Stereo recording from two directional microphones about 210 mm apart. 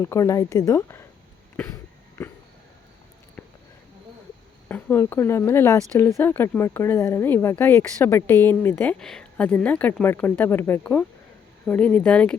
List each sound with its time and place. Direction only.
0.0 s speech: 15° left (ahead or behind)
4.7 s speech: 10° left (ahead or behind)